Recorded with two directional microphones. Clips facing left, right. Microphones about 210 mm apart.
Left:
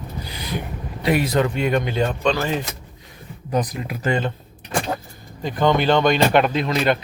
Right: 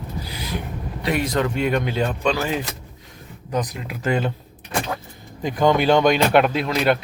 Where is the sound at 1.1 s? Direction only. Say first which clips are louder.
Left 3 dB; 5° left (ahead or behind).